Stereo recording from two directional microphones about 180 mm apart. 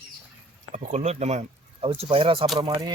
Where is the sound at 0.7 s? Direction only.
40° right (ahead or behind).